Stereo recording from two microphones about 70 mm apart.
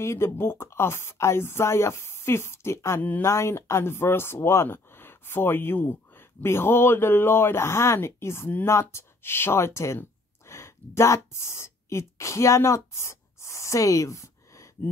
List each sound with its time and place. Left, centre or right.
0.0 s speech: left
3.0 s speech: left
3.3 s speech: left